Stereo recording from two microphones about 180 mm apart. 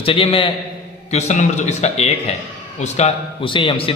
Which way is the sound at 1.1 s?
40° left (ahead or behind).